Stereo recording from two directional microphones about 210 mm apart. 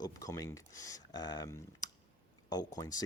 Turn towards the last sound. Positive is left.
turn(degrees=15)  # may be behind; listen again after turning